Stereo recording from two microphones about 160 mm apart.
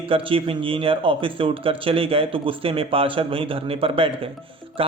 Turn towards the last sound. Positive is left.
turn(degrees=-35)  # may be behind; listen again after turning